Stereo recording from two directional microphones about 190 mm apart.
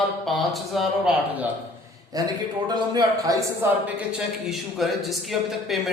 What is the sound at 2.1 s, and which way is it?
A man's voice, 20° right (ahead or behind).